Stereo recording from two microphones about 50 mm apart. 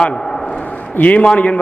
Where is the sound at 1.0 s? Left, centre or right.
Left.